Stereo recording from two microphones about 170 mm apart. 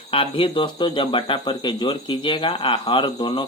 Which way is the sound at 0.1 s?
35° left (ahead or behind).